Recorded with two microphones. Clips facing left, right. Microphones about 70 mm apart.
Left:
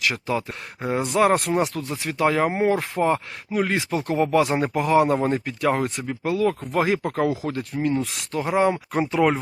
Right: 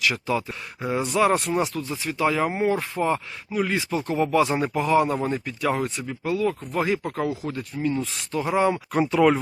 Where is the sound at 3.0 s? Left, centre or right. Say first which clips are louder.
Left 4 dB; left.